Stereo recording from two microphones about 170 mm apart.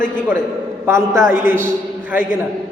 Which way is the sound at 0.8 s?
15° right (ahead or behind).